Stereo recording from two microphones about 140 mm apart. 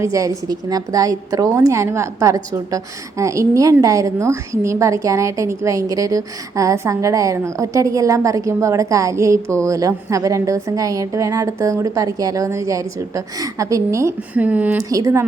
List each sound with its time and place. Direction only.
0.0 s a woman's voice: 25° right (ahead or behind)
14.8 s a woman's voice: 25° right (ahead or behind)